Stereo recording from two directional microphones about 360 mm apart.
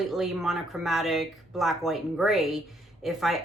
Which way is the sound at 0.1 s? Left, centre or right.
Centre.